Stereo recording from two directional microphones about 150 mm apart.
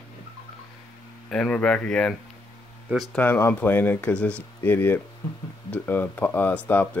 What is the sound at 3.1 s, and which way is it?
Speech, 15° left (ahead or behind).